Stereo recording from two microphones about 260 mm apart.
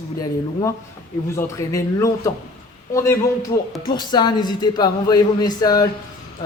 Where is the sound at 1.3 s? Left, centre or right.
Centre.